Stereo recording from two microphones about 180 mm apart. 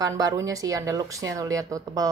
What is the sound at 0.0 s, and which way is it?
Speech, 20° right (ahead or behind).